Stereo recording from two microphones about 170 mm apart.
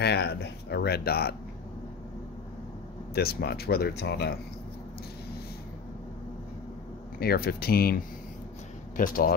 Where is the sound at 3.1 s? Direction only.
65° left (ahead or behind).